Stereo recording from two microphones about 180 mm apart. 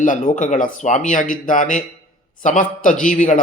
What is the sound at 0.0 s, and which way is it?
A man's voice, 45° left (ahead or behind).